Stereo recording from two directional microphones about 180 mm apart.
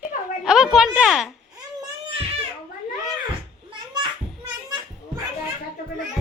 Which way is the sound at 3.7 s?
25° right (ahead or behind).